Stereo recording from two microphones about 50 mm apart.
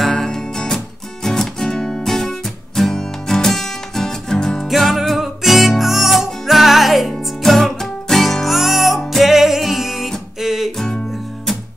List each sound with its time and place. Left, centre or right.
0.0 s music: centre
4.6 s music: centre